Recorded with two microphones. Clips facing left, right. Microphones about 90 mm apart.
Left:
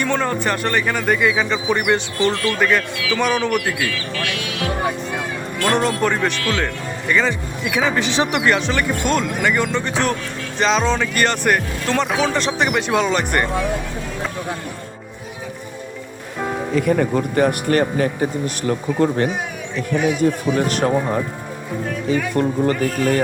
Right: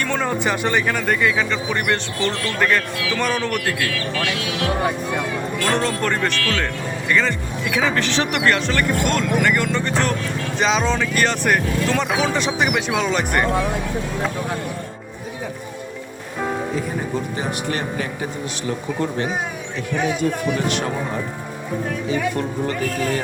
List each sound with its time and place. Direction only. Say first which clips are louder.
0.0 s speech: left 2 dB; centre (ahead or behind)
16.7 s speech: left 7 dB; 70° left (ahead or behind); by 19.3 s 45° left (ahead or behind)
20.6 s speech: left 4 dB; 40° left (ahead or behind)
22.1 s speech: left 5 dB; 40° left (ahead or behind)